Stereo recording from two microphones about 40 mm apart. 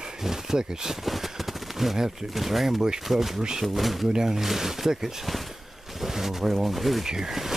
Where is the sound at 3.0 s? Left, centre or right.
Centre.